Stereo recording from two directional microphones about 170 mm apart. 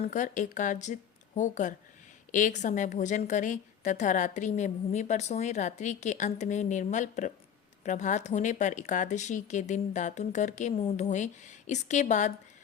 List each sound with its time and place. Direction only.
0.0 s a woman's voice: 45° left (ahead or behind)